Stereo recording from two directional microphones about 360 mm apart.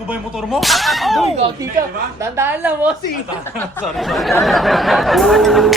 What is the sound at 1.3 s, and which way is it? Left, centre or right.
A man's voice, centre.